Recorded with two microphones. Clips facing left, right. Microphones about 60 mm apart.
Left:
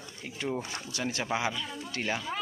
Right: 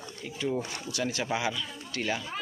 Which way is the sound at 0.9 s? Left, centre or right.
Left.